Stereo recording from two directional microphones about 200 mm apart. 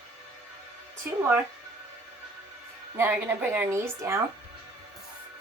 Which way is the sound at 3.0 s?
10° right (ahead or behind).